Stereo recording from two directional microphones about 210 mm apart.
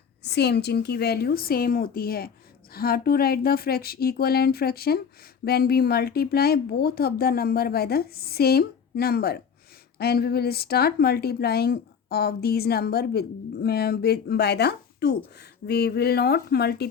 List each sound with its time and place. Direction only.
0.2 s speech: 50° left (ahead or behind)